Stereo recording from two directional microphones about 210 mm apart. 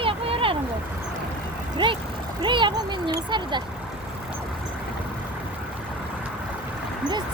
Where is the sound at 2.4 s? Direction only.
20° right (ahead or behind).